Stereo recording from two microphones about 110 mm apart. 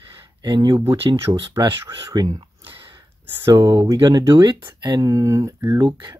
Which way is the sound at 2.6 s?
50° right (ahead or behind).